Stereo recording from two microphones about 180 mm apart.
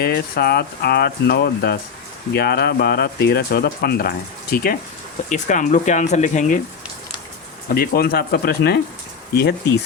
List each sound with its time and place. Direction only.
0.0 s speech: 60° left (ahead or behind)
5.3 s speech: 45° left (ahead or behind)
7.7 s speech: 55° left (ahead or behind)